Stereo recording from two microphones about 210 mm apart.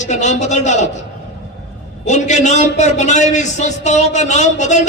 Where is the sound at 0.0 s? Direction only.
35° left (ahead or behind).